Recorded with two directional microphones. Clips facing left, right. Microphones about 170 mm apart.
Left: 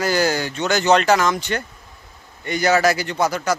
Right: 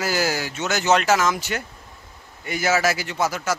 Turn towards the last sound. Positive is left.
turn(degrees=-5)  # may be behind; listen again after turning